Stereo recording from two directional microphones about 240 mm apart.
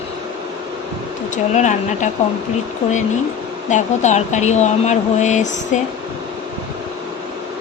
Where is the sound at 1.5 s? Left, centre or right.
Left.